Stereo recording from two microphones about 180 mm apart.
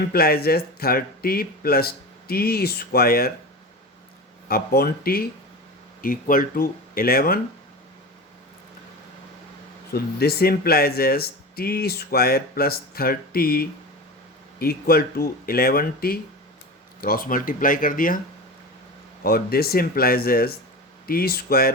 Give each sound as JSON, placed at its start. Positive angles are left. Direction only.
{"t": 0.1, "sound": "speech", "side_deg": 60}
{"t": 4.4, "sound": "speech", "side_deg": 55}
{"t": 9.9, "sound": "speech", "side_deg": 60}
{"t": 19.2, "sound": "speech", "side_deg": 60}